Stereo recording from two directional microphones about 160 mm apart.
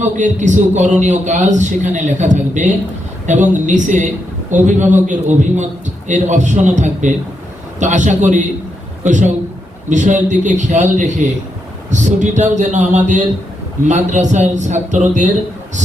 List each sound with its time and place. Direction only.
0.0 s a man's voice: 50° right (ahead or behind)